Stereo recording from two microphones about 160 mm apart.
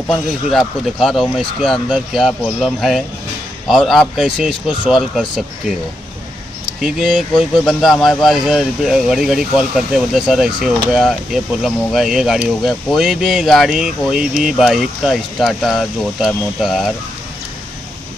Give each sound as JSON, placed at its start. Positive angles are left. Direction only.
{"t": 0.1, "sound": "speech", "side_deg": 0}
{"t": 6.8, "sound": "speech", "side_deg": -5}